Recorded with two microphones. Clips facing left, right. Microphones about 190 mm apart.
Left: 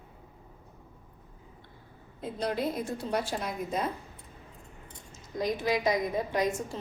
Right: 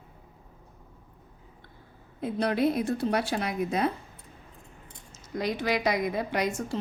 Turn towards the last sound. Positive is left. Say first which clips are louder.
# even
turn(degrees=-75)  # may be behind; listen again after turning